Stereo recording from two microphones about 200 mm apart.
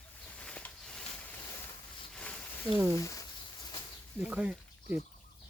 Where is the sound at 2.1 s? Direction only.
5° left (ahead or behind).